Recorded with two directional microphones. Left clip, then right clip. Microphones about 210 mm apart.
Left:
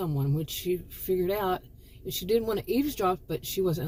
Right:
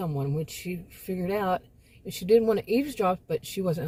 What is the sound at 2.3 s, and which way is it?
Speech, 15° right (ahead or behind).